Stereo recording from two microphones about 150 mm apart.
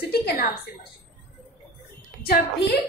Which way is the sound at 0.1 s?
90° left.